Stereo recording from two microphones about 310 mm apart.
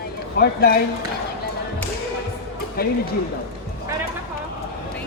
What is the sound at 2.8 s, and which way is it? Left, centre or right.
Speech, left.